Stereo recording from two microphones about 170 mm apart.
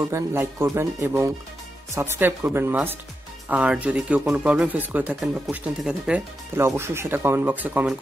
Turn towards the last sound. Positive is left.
turn(degrees=-10)  # may be behind; listen again after turning